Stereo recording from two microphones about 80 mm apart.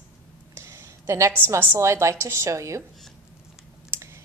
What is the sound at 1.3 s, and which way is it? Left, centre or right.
A woman's voice, right.